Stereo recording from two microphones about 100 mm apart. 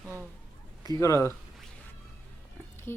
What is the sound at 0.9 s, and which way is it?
Speech, 30° left (ahead or behind).